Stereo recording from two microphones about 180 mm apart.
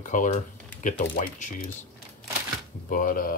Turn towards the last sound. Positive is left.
turn(degrees=50)  # may be behind; listen again after turning